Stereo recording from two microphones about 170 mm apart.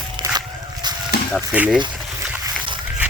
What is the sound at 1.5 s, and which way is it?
Speech, 10° right (ahead or behind).